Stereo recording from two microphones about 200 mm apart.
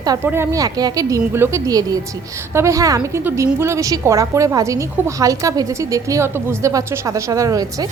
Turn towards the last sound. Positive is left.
turn(degrees=-15)  # may be behind; listen again after turning